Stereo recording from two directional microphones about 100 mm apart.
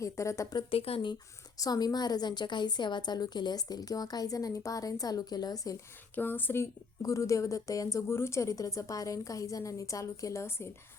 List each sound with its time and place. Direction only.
0.0 s a woman's voice: 30° left (ahead or behind)
0.7 s speech: 70° left (ahead or behind)
1.5 s a woman's voice: 40° left (ahead or behind)
6.1 s speech: 20° left (ahead or behind)
7.0 s a woman's voice: 35° left (ahead or behind)